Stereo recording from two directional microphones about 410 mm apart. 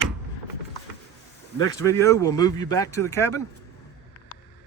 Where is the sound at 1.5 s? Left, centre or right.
Centre.